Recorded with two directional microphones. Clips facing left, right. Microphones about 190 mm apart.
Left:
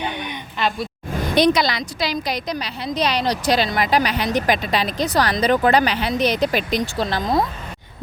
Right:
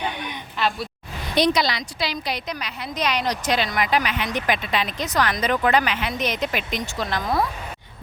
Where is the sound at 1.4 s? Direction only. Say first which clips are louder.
Left 3 dB; 50° left (ahead or behind).